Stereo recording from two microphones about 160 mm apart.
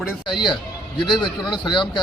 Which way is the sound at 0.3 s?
30° left (ahead or behind).